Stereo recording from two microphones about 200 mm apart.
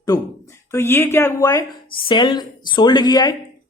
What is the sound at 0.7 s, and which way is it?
Speech, 10° left (ahead or behind).